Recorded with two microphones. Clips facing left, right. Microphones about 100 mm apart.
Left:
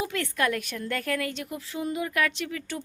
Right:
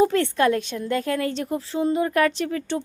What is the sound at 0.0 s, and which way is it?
Speech, 35° right (ahead or behind).